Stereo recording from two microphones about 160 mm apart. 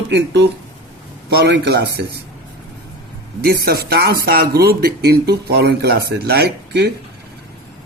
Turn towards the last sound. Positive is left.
turn(degrees=-90)